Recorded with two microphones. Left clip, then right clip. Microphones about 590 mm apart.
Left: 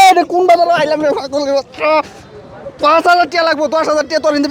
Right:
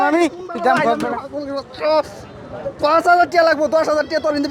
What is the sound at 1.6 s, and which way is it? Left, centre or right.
A man's voice, left.